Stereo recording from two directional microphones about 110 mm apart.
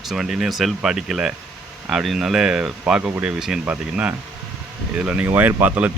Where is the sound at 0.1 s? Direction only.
Centre (ahead or behind).